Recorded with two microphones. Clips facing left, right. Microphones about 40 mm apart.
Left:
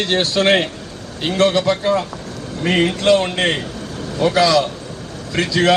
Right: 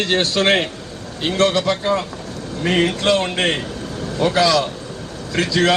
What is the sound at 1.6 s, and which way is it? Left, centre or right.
Speech, centre.